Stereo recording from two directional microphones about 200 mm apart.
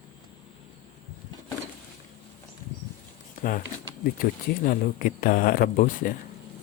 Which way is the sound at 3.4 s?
45° left (ahead or behind).